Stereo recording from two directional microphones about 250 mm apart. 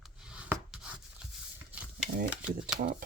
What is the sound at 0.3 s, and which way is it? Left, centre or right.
Rub, centre.